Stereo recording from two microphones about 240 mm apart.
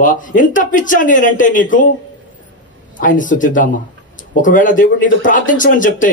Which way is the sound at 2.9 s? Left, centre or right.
Left.